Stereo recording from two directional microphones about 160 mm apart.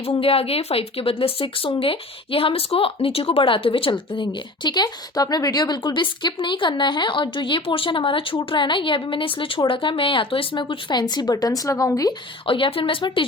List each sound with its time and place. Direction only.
0.0 s speech: 35° left (ahead or behind)